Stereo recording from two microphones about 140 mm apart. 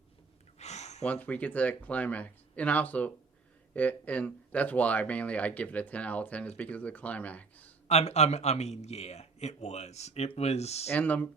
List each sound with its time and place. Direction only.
0.6 s a sound: 50° left (ahead or behind)
1.0 s speech: 10° left (ahead or behind)
7.9 s a man's voice: 50° left (ahead or behind)
10.8 s speech: 10° left (ahead or behind)